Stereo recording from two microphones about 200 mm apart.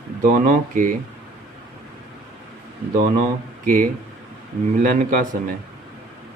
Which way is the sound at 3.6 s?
40° right (ahead or behind).